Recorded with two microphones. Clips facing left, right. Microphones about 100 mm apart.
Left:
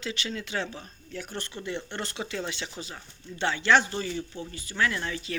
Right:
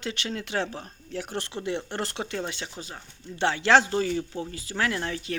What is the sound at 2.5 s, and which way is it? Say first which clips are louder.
Speech: even; 45° right (ahead or behind).